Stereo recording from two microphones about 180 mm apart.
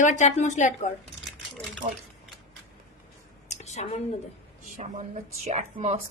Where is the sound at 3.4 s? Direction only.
40° left (ahead or behind).